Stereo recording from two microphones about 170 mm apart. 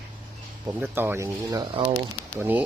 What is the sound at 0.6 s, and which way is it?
Speech, 15° right (ahead or behind).